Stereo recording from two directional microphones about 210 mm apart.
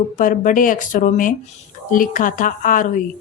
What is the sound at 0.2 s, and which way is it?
Speech, 40° left (ahead or behind).